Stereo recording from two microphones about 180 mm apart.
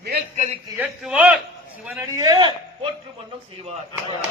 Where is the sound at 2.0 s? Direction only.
25° right (ahead or behind).